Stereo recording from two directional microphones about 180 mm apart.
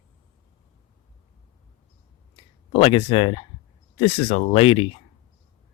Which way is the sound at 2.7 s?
30° left (ahead or behind).